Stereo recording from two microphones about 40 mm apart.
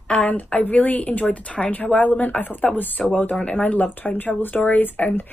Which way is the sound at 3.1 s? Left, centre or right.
Left.